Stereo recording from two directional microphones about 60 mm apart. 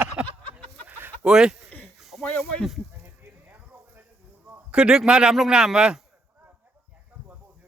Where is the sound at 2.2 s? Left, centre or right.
Centre.